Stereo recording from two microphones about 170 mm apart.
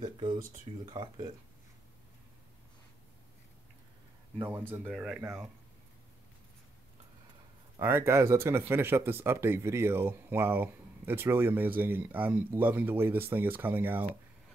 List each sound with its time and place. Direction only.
0.0 s speech: 25° right (ahead or behind)
4.8 s speech: 5° right (ahead or behind)
7.8 s speech: 15° right (ahead or behind)